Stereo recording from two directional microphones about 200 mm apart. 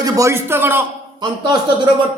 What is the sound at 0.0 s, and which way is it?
A man's voice, 15° right (ahead or behind).